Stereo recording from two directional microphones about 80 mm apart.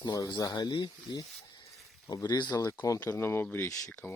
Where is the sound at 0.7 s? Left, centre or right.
Left.